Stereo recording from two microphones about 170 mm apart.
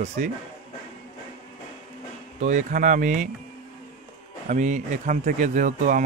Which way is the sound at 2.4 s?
45° right (ahead or behind).